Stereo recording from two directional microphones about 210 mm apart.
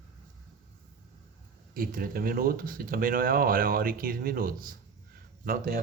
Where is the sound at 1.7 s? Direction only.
45° right (ahead or behind).